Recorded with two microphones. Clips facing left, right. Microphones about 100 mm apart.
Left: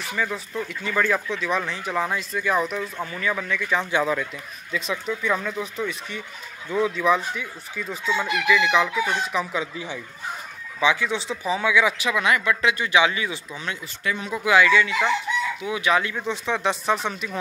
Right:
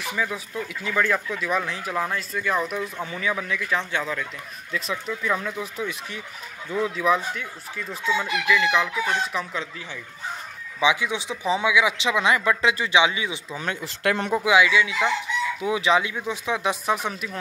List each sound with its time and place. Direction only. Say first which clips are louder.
0.1 s speech: left 1 dB; 5° right (ahead or behind)
2.8 s speech: even; 10° right (ahead or behind)
3.9 s speech: left 5 dB; 15° left (ahead or behind)
4.7 s speech: left 2 dB; centre (ahead or behind)
10.8 s speech: even; 15° right (ahead or behind)
12.0 s speech: right 1 dB; 25° right (ahead or behind)
13.0 s speech: even; 15° right (ahead or behind)
13.6 s speech: right 5 dB; 45° right (ahead or behind)
13.8 s speech: right 6 dB; 85° right
14.5 s speech: left 2 dB; 10° right (ahead or behind)
15.6 s speech: right 2 dB; 25° right (ahead or behind)
16.0 s speech: left 1 dB; 10° right (ahead or behind)